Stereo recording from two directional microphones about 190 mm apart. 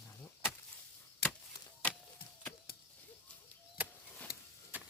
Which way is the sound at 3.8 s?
10° right (ahead or behind).